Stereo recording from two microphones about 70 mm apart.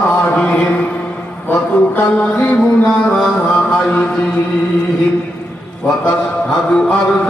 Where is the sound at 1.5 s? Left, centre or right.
Left.